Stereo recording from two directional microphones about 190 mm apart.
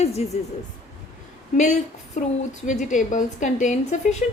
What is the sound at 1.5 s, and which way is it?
A woman's voice, 40° left (ahead or behind).